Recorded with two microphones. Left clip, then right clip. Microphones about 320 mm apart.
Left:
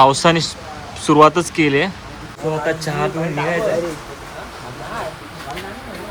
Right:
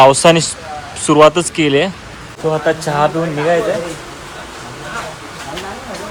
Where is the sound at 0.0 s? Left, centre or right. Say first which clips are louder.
Right 5 dB; centre.